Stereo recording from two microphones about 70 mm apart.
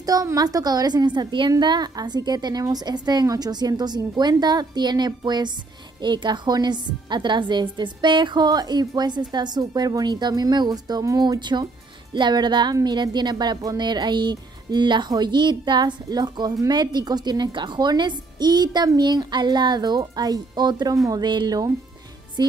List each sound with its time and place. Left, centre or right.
0.0 s a woman's voice: right
13.6 s a woman's voice: right
22.4 s music: right